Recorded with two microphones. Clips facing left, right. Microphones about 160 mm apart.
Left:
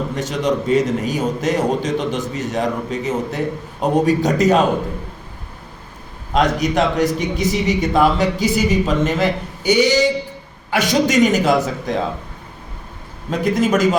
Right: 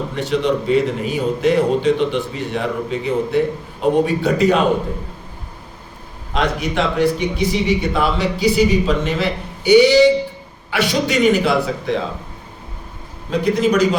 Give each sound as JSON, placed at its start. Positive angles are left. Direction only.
{"t": 0.2, "sound": "a man's voice", "side_deg": 45}
{"t": 6.3, "sound": "a man's voice", "side_deg": 45}
{"t": 13.4, "sound": "a man's voice", "side_deg": 45}